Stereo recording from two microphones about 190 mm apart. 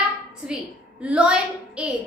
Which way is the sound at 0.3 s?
5° right (ahead or behind).